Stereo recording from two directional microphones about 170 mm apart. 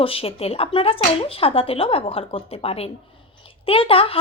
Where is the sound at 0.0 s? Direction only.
35° left (ahead or behind).